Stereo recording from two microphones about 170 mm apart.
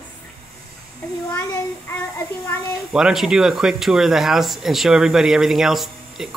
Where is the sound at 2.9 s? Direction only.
5° right (ahead or behind).